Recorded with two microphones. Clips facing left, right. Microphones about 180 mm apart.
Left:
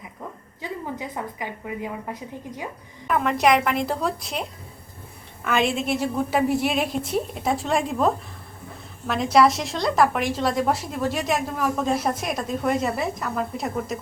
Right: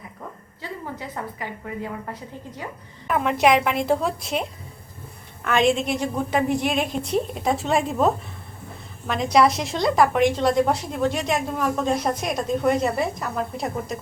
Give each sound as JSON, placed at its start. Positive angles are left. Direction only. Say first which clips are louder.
{"t": 0.6, "sound": "a woman's voice", "louder": "left 2 dB", "side_deg": 15}
{"t": 3.1, "sound": "a woman's voice", "louder": "right 1 dB", "side_deg": 0}
{"t": 5.5, "sound": "a woman's voice", "louder": "right 2 dB", "side_deg": 5}